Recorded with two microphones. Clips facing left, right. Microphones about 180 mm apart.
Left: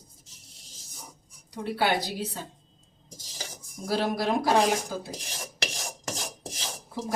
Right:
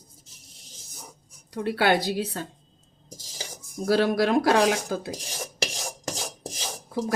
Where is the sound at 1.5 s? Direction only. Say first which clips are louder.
Right 4 dB; 75° right (ahead or behind).